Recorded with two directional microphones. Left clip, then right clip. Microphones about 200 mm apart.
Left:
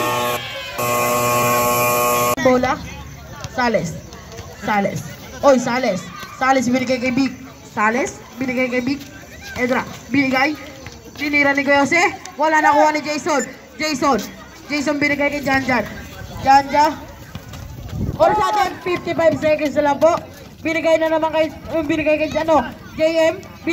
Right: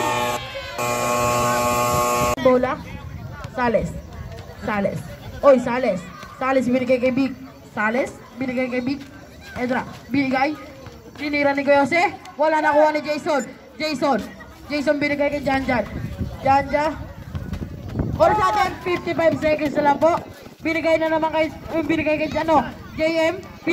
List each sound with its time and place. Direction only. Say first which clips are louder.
0.0 s music: left 2 dB; 40° left (ahead or behind)
1.1 s a sound: left 1 dB; 35° left (ahead or behind)
2.5 s a woman's voice: left 2 dB; 30° right (ahead or behind)
18.2 s speech: left 2 dB; 5° left (ahead or behind)
18.9 s speech: left 3 dB; 25° left (ahead or behind)